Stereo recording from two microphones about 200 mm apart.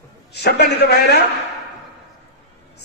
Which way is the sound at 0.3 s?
55° left (ahead or behind).